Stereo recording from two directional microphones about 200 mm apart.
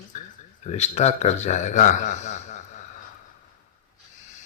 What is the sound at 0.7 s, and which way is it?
A man's voice, 35° left (ahead or behind).